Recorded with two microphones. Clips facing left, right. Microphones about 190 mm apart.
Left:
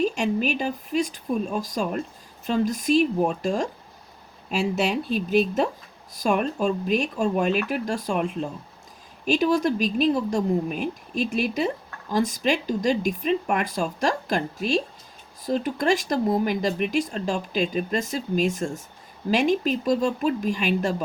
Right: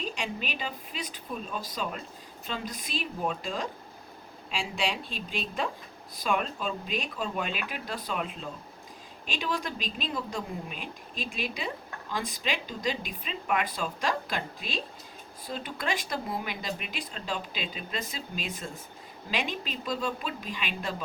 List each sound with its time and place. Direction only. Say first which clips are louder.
0.0 s speech: left 12 dB; 45° left (ahead or behind)
9.3 s speech: left 12 dB; 45° left (ahead or behind)